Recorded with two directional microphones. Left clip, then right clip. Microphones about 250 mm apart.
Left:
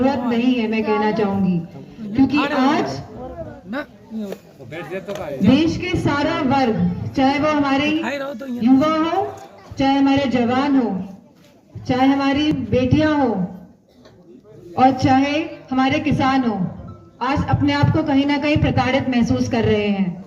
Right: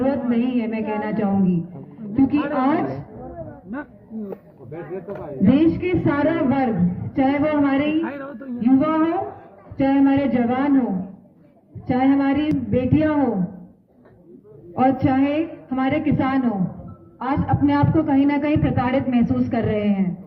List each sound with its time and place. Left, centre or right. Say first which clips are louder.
0.0 s a man's voice: left 3 dB; left
2.6 s a man's voice: left 1 dB; left
4.9 s speech: left 3 dB; left
5.5 s a man's voice: even; left
8.0 s speech: left 5 dB; left
8.6 s a man's voice: left 2 dB; left
14.8 s a man's voice: left 4 dB; left